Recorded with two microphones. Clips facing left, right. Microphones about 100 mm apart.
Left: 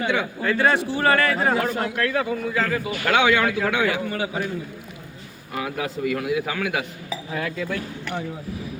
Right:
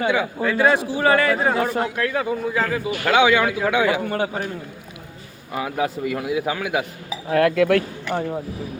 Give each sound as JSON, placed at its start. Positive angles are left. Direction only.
{"t": 0.1, "sound": "speech", "side_deg": -10}
{"t": 2.0, "sound": "speech", "side_deg": -20}
{"t": 4.1, "sound": "a man's voice", "side_deg": -40}
{"t": 5.5, "sound": "speech", "side_deg": -20}
{"t": 7.3, "sound": "speech", "side_deg": -75}